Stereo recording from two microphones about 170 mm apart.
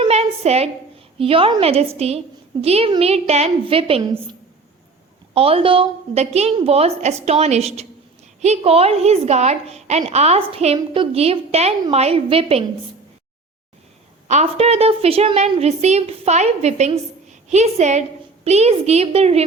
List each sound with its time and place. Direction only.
0.0 s a sound: 40° right (ahead or behind)
1.2 s a woman's voice: 30° right (ahead or behind)
5.3 s a woman's voice: 35° right (ahead or behind)
14.3 s a woman's voice: 40° right (ahead or behind)